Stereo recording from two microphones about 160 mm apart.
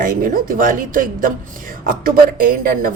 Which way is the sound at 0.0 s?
60° right (ahead or behind).